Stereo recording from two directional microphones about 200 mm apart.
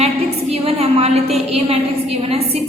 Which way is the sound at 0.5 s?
30° right (ahead or behind).